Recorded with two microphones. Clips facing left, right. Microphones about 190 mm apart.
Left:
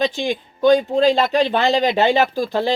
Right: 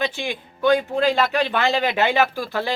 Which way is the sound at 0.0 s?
15° left (ahead or behind).